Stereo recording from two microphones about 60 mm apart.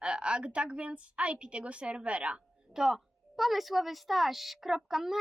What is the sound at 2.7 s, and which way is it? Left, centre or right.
A woman's voice, centre.